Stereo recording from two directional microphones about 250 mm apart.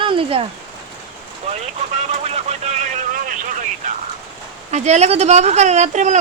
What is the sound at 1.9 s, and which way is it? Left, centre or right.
Vehicle, right.